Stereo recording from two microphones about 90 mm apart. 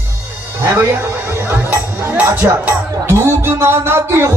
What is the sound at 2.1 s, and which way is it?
Music, 20° right (ahead or behind).